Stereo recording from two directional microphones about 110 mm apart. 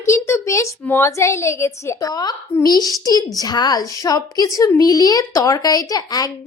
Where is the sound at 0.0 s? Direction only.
25° left (ahead or behind).